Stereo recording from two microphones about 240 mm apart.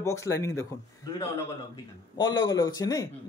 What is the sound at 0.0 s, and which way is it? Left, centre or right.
Speech, centre.